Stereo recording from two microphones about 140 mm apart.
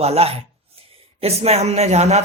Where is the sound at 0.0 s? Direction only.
45° right (ahead or behind).